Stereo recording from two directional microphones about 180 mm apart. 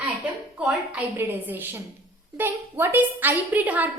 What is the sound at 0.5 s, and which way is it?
A woman's voice, 5° right (ahead or behind).